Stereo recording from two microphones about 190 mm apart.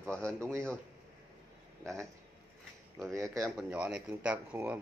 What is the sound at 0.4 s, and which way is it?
Speech, 15° right (ahead or behind).